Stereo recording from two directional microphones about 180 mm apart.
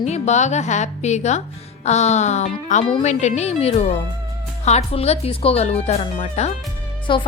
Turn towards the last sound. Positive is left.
turn(degrees=25)  # may be behind; listen again after turning